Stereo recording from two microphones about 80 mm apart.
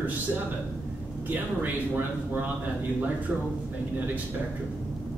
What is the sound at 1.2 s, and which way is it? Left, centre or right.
Speech, right.